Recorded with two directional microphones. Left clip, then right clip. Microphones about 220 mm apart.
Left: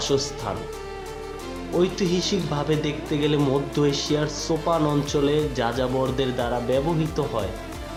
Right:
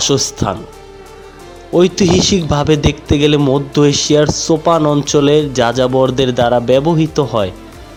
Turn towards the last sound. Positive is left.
turn(degrees=-35)  # may be behind; listen again after turning